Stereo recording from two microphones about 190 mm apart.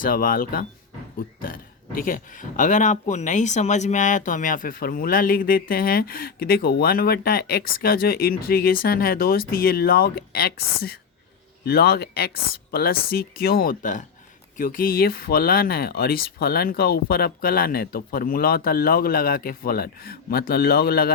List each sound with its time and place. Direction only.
0.0 s speech: 50° left (ahead or behind)
2.0 s speech: 45° left (ahead or behind)